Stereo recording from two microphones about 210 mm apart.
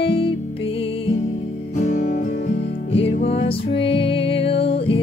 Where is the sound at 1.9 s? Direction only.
35° left (ahead or behind).